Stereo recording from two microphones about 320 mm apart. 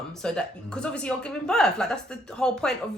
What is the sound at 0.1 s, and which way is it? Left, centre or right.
A woman's voice, centre.